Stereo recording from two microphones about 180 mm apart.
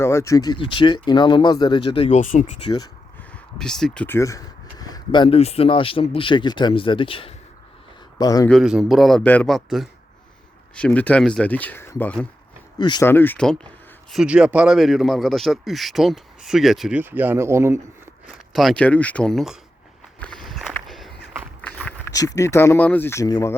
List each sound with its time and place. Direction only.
0.0 s speech: 15° left (ahead or behind); by 2.4 s 40° left (ahead or behind)
2.6 s speech: 20° left (ahead or behind)
3.3 s speech: 5° left (ahead or behind); by 8.4 s 20° left (ahead or behind)
8.4 s a man's voice: centre (ahead or behind)
12.8 s speech: 25° left (ahead or behind)
13.1 s speech: 10° left (ahead or behind)
14.1 s a man's voice: 5° right (ahead or behind)
18.5 s a man's voice: centre (ahead or behind)
20.1 s walk: 5° left (ahead or behind)
21.6 s a sound: 10° left (ahead or behind)
22.1 s speech: 20° left (ahead or behind)